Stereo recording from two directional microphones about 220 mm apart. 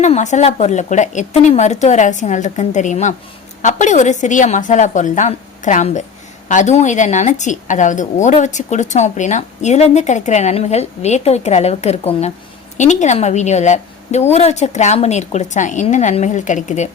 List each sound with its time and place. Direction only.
0.0 s a woman's voice: 30° left (ahead or behind)